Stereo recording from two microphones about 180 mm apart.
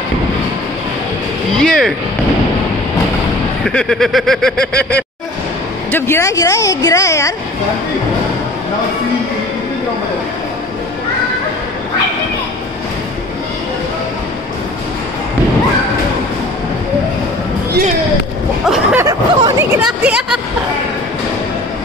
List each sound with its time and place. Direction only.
1.5 s vehicle: 5° left (ahead or behind)
3.6 s speech: centre (ahead or behind)
5.9 s a woman's voice: 15° left (ahead or behind)
18.7 s speech: 5° right (ahead or behind)
19.0 s speech: 15° right (ahead or behind)